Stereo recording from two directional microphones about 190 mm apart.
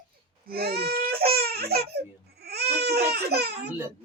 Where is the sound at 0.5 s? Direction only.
55° right (ahead or behind).